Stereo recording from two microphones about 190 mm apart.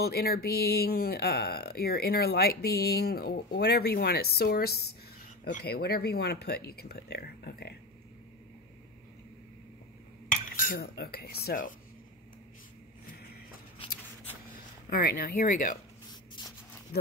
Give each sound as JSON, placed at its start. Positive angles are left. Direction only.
{"t": 0.0, "sound": "speech", "side_deg": 55}
{"t": 10.3, "sound": "cutlery", "side_deg": 45}
{"t": 13.8, "sound": "scissors", "side_deg": 30}
{"t": 14.9, "sound": "speech", "side_deg": 50}
{"t": 16.1, "sound": "spray", "side_deg": 20}